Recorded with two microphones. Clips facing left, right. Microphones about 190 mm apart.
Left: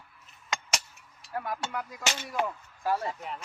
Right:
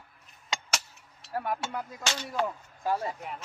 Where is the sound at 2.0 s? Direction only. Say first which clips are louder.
Even; 20° left (ahead or behind).